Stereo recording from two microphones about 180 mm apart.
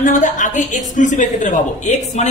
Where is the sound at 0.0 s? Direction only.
45° left (ahead or behind).